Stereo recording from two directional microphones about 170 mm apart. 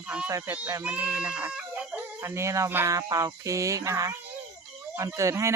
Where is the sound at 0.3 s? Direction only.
15° right (ahead or behind).